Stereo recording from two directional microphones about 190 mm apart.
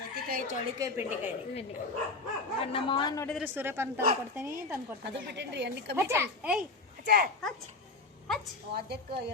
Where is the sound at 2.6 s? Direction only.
25° left (ahead or behind).